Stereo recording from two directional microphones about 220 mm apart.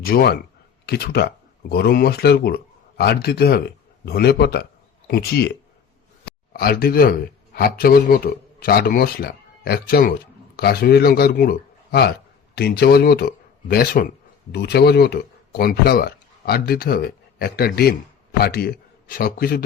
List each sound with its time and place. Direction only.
0.0 s a man's voice: 40° left (ahead or behind)
6.5 s a man's voice: 45° left (ahead or behind)